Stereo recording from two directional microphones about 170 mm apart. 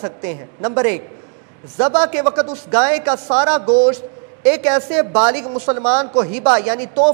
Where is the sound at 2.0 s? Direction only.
10° right (ahead or behind).